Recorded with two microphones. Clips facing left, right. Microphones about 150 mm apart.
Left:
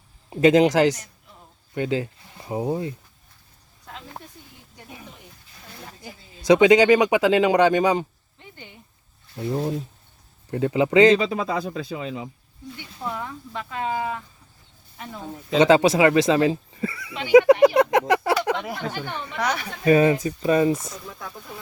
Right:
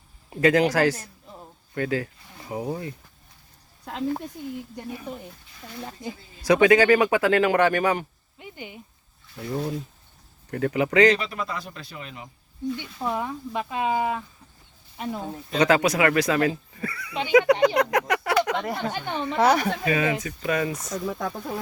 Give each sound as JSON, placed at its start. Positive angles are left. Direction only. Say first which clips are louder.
{"t": 0.3, "sound": "speech", "louder": "left 4 dB", "side_deg": 20}
{"t": 6.4, "sound": "speech", "louder": "left 3 dB", "side_deg": 20}
{"t": 8.4, "sound": "a sound", "louder": "right 5 dB", "side_deg": -15}
{"t": 9.3, "sound": "speech", "louder": "left 3 dB", "side_deg": 25}
{"t": 12.7, "sound": "speech", "louder": "right 2 dB", "side_deg": -20}
{"t": 15.5, "sound": "speech", "louder": "left 4 dB", "side_deg": 25}
{"t": 17.7, "sound": "a sound", "louder": "left 4 dB", "side_deg": 25}
{"t": 18.9, "sound": "speech", "louder": "right 3 dB", "side_deg": -25}
{"t": 19.8, "sound": "speech", "louder": "left 7 dB", "side_deg": 35}